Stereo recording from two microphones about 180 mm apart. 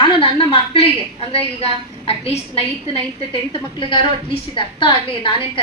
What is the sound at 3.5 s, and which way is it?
A woman's voice, 30° left (ahead or behind).